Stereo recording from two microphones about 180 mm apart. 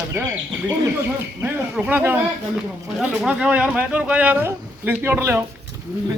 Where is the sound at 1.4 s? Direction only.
10° right (ahead or behind).